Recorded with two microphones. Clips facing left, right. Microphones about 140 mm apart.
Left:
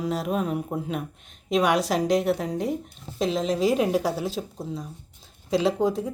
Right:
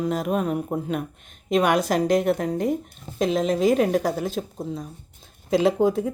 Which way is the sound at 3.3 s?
50° right (ahead or behind).